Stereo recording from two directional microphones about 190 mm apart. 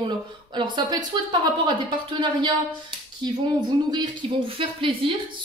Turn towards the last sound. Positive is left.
turn(degrees=-30)  # may be behind; listen again after turning